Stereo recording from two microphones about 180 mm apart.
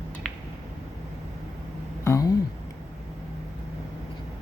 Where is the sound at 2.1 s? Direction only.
20° left (ahead or behind).